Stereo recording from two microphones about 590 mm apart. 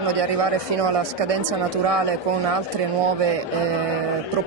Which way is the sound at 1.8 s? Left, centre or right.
Right.